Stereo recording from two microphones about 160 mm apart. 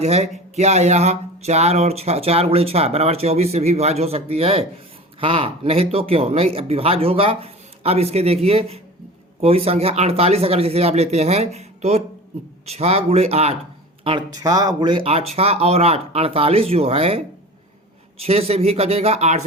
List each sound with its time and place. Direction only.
0.0 s speech: 40° right (ahead or behind)
14.4 s speech: 25° right (ahead or behind); by 19.5 s 45° right (ahead or behind)